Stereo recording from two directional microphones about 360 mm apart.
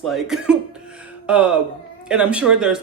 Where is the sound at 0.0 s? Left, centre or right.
Centre.